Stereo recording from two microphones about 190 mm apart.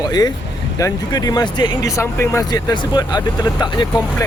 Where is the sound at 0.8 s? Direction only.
20° left (ahead or behind).